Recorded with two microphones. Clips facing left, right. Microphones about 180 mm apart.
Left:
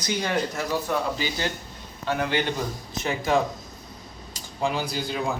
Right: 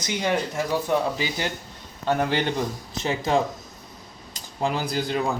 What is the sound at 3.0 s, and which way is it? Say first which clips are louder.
Speech: right 1 dB; 30° right (ahead or behind).